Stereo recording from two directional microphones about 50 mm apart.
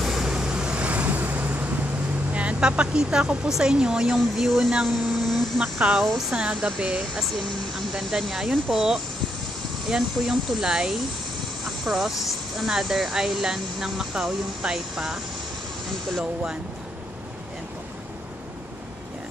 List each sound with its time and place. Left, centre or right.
0.0 s vehicle: centre; by 1.7 s right
2.3 s speech: right; by 4.7 s centre
4.8 s a sound: centre
6.3 s speech: centre
7.2 s speech: centre
9.8 s speech: centre
15.9 s speech: centre